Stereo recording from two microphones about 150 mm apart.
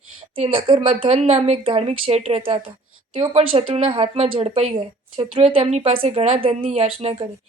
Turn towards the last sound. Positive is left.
turn(degrees=-40)  # may be behind; listen again after turning